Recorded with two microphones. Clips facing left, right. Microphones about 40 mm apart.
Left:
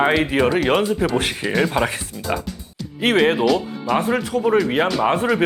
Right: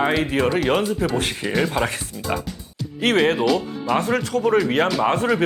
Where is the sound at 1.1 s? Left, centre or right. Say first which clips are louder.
Left 2 dB; left.